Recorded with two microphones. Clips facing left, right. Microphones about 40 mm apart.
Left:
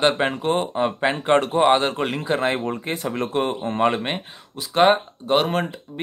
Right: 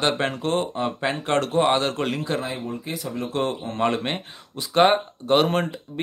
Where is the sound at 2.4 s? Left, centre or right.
Left.